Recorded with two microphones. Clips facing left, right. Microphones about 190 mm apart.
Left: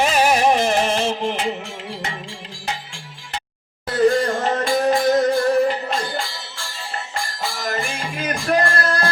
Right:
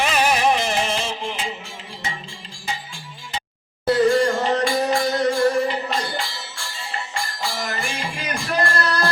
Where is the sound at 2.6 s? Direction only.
65° left (ahead or behind).